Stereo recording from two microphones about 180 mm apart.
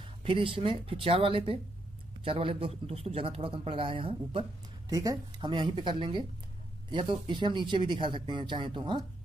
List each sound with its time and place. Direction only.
0.0 s a man's voice: 30° right (ahead or behind)
4.8 s speech: 20° right (ahead or behind)